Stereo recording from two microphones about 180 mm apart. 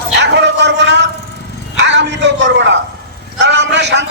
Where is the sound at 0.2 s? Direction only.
75° right (ahead or behind).